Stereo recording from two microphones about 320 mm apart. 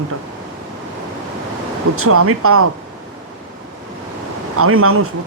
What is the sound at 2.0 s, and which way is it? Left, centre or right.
Speech, right.